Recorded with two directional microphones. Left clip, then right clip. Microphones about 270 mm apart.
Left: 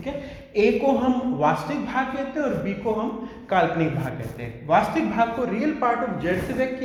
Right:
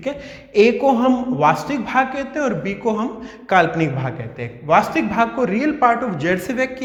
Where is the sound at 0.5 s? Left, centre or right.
Right.